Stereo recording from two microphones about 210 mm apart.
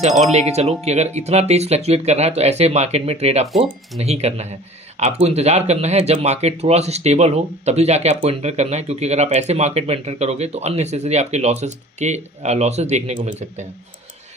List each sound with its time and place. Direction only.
0.3 s speech: 30° right (ahead or behind)